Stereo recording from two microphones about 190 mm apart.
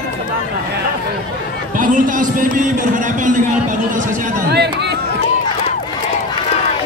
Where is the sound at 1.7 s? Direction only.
45° right (ahead or behind).